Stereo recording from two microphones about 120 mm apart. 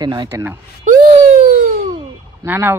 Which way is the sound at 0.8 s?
85° right.